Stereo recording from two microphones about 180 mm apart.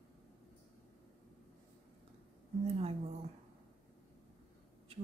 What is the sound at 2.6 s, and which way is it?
Speech, 35° right (ahead or behind).